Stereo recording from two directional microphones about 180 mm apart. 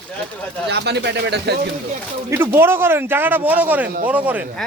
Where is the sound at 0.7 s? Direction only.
70° right (ahead or behind).